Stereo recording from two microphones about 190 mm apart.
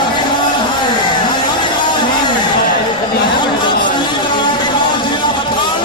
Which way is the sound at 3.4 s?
25° left (ahead or behind).